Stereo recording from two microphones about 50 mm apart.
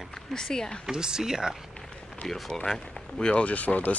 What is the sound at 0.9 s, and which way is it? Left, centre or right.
Speech, centre.